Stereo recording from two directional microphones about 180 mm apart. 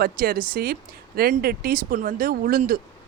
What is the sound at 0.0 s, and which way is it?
Speech, 55° right (ahead or behind).